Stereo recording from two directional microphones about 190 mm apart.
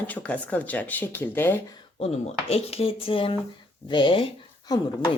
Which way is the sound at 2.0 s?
35° left (ahead or behind).